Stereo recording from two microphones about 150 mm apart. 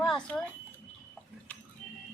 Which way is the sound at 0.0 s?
5° left (ahead or behind).